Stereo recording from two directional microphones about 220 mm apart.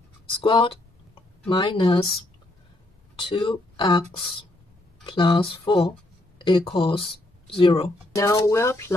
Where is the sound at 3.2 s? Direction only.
20° left (ahead or behind).